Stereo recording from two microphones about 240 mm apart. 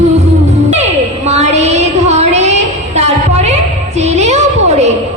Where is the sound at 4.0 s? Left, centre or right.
Right.